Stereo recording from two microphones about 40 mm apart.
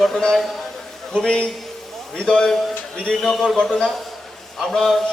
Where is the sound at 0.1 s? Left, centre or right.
Centre.